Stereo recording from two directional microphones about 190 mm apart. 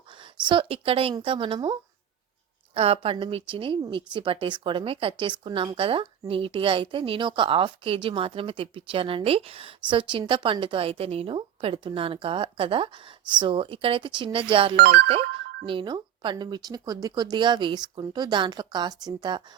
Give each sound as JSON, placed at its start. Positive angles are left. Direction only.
{"t": 0.1, "sound": "speech", "side_deg": -25}
{"t": 2.7, "sound": "speech", "side_deg": -30}
{"t": 14.8, "sound": "speech", "side_deg": -60}
{"t": 15.6, "sound": "speech", "side_deg": -25}